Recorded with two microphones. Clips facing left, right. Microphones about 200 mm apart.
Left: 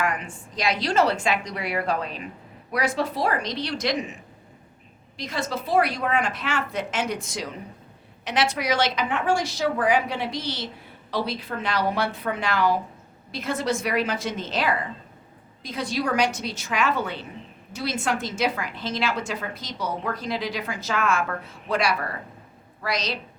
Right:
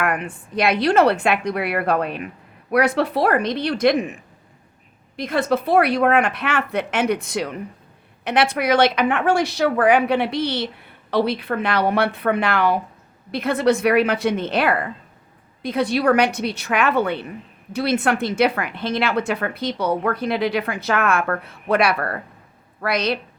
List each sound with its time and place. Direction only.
0.0 s a woman's voice: 60° right (ahead or behind)